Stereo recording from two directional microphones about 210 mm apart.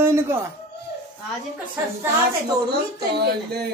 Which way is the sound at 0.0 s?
10° right (ahead or behind).